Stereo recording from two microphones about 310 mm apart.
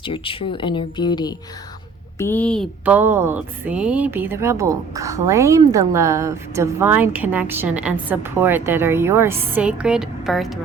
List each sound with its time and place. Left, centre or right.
0.0 s a woman's voice: centre